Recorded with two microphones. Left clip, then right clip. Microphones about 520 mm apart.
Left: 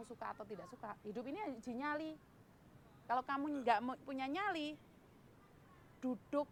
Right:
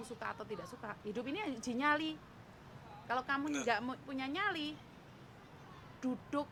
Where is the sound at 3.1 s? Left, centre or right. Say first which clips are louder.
Right 2 dB; centre.